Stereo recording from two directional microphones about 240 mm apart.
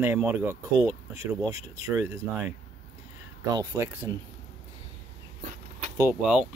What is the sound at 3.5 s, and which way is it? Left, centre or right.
Speech, centre.